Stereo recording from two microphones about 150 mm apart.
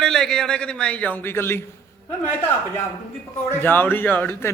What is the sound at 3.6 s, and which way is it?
Speech, 15° left (ahead or behind).